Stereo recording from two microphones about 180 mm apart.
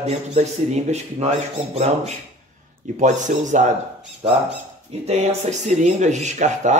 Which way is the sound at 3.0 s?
40° right (ahead or behind).